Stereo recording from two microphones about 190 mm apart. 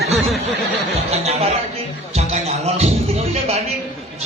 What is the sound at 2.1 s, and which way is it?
Music, 35° right (ahead or behind).